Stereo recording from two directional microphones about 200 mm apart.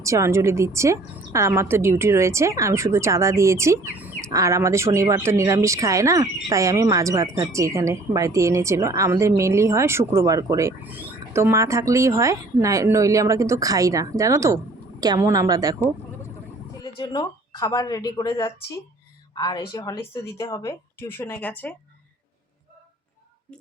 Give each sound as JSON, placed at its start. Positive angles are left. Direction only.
{"t": 0.0, "sound": "a woman's voice", "side_deg": -15}
{"t": 16.8, "sound": "speech", "side_deg": 20}